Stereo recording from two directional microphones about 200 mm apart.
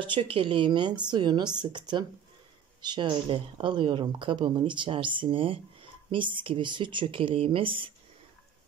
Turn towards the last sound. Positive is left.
turn(degrees=-25)  # may be behind; listen again after turning